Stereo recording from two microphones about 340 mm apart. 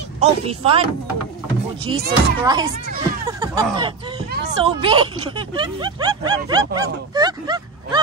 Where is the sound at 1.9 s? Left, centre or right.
Centre.